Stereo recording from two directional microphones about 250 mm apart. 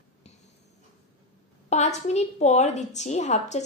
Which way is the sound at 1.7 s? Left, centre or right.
Left.